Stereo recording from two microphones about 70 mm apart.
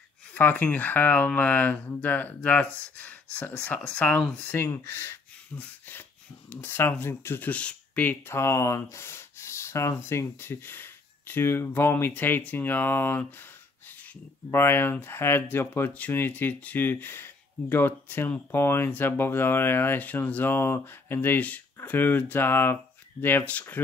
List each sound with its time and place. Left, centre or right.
0.3 s speech: left
4.6 s speech: left
8.3 s speech: left
14.5 s speech: left